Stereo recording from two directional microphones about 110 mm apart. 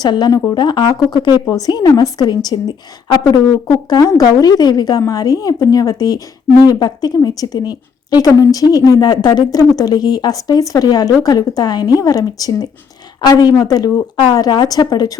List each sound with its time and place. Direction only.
0.0 s a woman's voice: 40° left (ahead or behind)